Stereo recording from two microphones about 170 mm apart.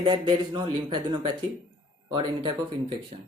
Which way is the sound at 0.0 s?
30° right (ahead or behind).